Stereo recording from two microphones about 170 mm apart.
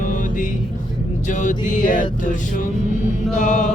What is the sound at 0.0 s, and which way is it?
Music, 50° left (ahead or behind).